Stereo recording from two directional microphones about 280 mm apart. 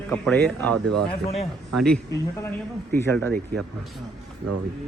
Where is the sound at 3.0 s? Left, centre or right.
Centre.